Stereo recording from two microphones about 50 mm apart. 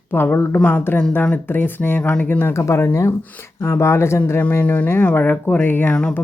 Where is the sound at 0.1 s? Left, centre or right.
Left.